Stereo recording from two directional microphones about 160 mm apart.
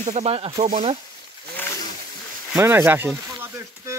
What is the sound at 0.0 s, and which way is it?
Speech, 45° right (ahead or behind).